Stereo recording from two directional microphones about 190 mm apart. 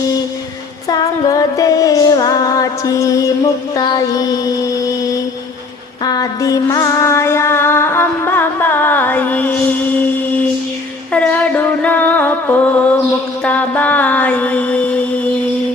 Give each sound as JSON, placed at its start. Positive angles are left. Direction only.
{"t": 0.9, "sound": "music", "side_deg": 20}
{"t": 6.0, "sound": "mantra", "side_deg": 20}
{"t": 11.1, "sound": "music", "side_deg": 10}
{"t": 13.4, "sound": "mantra", "side_deg": 10}